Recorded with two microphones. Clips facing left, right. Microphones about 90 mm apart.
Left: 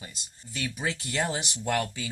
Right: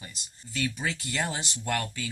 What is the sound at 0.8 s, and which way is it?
Speech, 25° left (ahead or behind).